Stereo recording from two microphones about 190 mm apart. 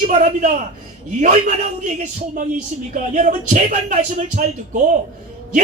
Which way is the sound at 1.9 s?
40° right (ahead or behind).